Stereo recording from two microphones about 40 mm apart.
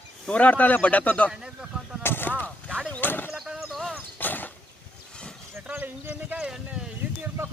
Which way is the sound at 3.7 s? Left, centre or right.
Centre.